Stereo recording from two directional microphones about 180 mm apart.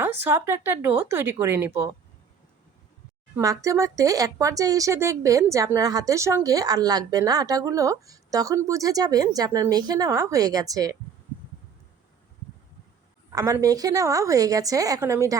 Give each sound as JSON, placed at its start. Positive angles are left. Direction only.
{"t": 0.0, "sound": "speech", "side_deg": -10}
{"t": 3.3, "sound": "speech", "side_deg": -20}
{"t": 13.3, "sound": "speech", "side_deg": -20}